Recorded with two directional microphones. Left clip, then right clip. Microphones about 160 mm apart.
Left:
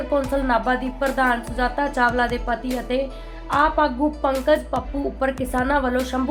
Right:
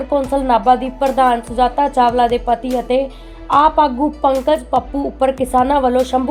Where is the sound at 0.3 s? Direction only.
30° right (ahead or behind).